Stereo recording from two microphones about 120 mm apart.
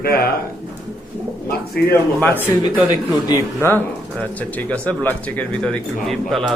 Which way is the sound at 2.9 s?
30° left (ahead or behind).